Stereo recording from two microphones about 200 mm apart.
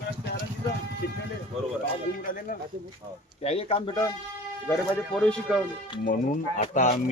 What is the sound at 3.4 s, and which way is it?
Speech, 30° left (ahead or behind).